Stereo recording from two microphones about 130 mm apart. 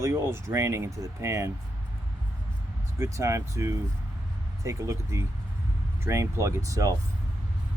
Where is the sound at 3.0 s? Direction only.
25° right (ahead or behind).